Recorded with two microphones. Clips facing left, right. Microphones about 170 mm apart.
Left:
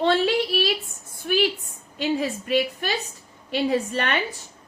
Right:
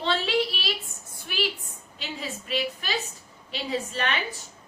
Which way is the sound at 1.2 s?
50° left (ahead or behind).